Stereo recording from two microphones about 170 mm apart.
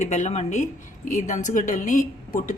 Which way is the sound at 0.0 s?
45° left (ahead or behind).